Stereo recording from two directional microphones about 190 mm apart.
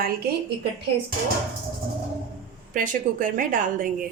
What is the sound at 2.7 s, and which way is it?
A woman's voice, 45° right (ahead or behind).